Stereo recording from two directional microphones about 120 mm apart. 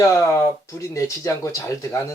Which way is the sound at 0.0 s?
25° left (ahead or behind).